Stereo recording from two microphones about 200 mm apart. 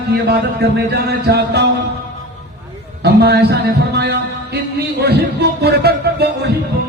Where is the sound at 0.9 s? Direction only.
55° right (ahead or behind).